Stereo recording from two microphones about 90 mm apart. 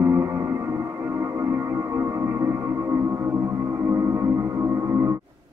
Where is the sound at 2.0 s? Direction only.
30° right (ahead or behind).